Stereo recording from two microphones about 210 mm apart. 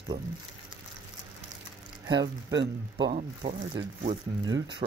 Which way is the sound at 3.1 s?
35° right (ahead or behind).